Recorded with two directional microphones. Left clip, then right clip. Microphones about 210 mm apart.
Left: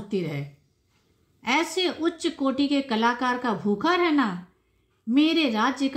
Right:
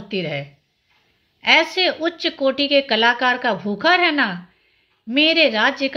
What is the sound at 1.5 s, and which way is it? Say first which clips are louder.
A woman's voice: right 8 dB; 15° left (ahead or behind).